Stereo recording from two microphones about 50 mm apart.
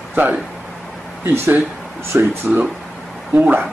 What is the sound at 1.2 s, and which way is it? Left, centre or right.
Speech, right.